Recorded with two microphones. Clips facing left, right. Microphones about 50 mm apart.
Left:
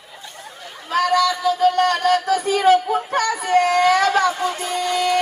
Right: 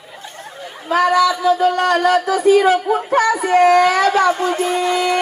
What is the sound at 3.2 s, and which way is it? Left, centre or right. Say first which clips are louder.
Speech: right 6 dB; centre.